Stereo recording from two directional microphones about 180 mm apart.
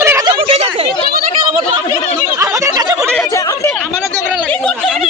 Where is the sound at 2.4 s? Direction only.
20° right (ahead or behind).